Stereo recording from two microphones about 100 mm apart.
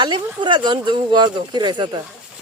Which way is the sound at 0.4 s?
50° right (ahead or behind).